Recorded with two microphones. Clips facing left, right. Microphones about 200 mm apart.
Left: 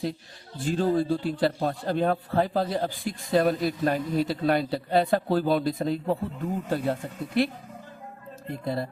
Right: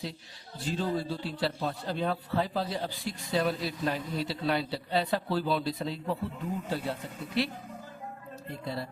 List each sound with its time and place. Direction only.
0.6 s a man's voice: 50° left (ahead or behind)